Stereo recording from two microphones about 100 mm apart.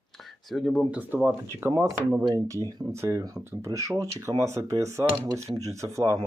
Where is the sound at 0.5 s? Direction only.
5° left (ahead or behind).